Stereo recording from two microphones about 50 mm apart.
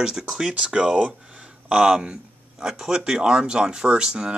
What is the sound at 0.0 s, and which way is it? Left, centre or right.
Speech, centre.